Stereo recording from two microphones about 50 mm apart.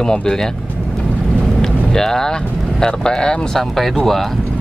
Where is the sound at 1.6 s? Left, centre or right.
Centre.